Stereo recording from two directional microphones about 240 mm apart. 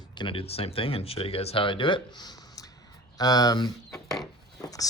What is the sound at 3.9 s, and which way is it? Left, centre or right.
Speech, centre.